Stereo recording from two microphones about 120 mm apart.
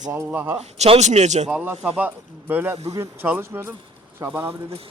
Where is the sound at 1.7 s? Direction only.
10° right (ahead or behind); by 4.4 s 25° right (ahead or behind).